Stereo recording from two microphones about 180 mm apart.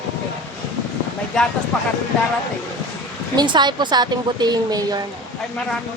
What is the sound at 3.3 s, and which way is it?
Speech, 25° right (ahead or behind).